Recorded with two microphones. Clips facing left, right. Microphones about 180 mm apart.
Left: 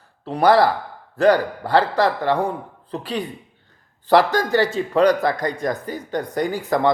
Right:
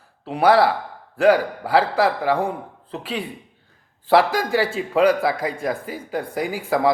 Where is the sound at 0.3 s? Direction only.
5° right (ahead or behind).